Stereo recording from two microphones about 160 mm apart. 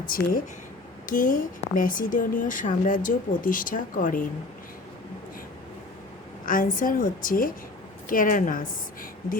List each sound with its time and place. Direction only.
0.1 s a woman's voice: 60° left (ahead or behind)
6.4 s a woman's voice: 60° left (ahead or behind)